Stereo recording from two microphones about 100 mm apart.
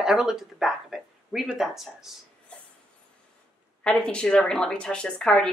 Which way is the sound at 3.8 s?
5° left (ahead or behind).